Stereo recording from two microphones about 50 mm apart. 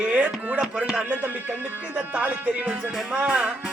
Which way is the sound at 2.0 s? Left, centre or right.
Right.